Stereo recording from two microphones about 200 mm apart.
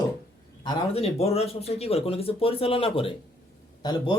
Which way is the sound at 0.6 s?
30° left (ahead or behind).